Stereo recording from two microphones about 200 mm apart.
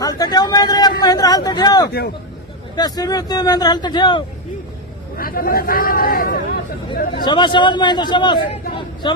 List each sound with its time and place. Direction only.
0.0 s a man's voice: 20° left (ahead or behind)
5.1 s a man's voice: 45° left (ahead or behind)
7.3 s speech: 20° left (ahead or behind)